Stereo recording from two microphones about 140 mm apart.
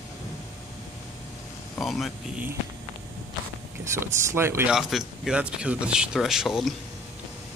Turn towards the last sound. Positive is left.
turn(degrees=0)  # may be behind; listen again after turning